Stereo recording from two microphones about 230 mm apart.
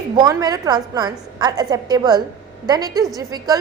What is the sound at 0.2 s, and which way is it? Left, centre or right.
A woman's voice, centre.